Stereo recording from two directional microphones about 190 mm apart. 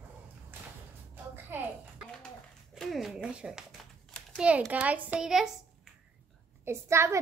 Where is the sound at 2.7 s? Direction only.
Centre (ahead or behind).